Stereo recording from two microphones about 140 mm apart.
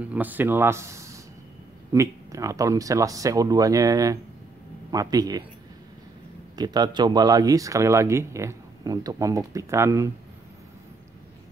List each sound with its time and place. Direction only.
0.0 s speech: 10° right (ahead or behind)
6.5 s speech: 30° right (ahead or behind)